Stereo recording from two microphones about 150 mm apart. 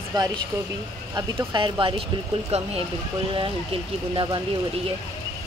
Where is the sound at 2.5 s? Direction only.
45° right (ahead or behind).